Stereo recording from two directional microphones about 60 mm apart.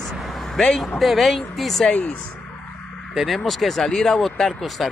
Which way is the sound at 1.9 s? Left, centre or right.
Left.